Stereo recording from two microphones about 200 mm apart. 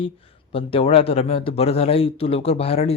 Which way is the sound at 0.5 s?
30° left (ahead or behind).